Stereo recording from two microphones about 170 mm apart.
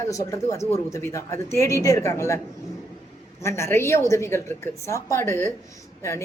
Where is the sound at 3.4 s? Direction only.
15° left (ahead or behind).